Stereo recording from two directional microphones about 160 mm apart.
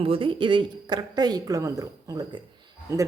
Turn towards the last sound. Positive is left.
turn(degrees=-25)  # may be behind; listen again after turning